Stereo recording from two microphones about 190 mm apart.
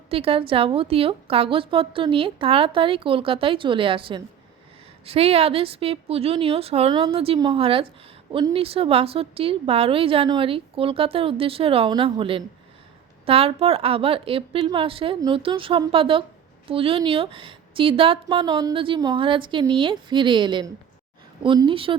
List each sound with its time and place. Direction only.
0.1 s a woman's voice: 30° right (ahead or behind)